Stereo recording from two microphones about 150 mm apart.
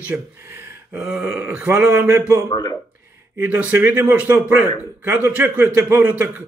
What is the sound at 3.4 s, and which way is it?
A man's voice, 10° right (ahead or behind).